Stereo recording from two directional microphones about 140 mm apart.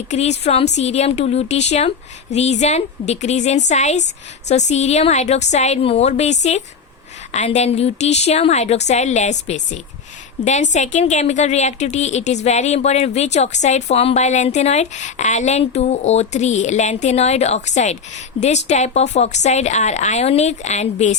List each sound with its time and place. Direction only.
0.1 s a woman's voice: 50° left (ahead or behind)